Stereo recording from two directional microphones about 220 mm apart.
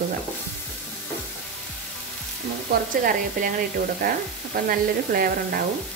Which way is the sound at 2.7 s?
40° right (ahead or behind).